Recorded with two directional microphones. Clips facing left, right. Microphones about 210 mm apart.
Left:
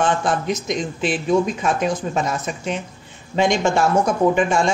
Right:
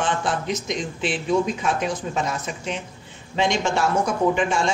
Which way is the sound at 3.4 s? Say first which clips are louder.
Left 4 dB; 50° left (ahead or behind).